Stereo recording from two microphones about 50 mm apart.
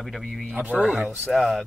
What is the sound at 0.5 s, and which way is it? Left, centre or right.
Speech, right.